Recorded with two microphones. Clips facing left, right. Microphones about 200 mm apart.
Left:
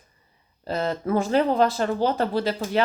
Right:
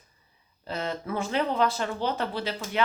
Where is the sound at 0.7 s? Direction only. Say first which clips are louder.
Left 7 dB; 40° left (ahead or behind).